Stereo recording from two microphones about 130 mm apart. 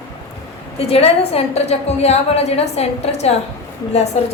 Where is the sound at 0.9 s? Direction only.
50° left (ahead or behind).